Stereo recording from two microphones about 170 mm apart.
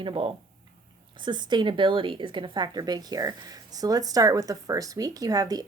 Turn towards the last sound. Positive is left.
turn(degrees=-20)  # may be behind; listen again after turning